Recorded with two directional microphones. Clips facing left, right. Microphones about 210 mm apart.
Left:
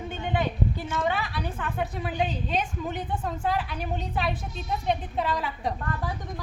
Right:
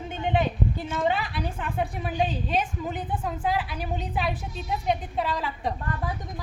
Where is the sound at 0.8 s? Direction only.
30° right (ahead or behind).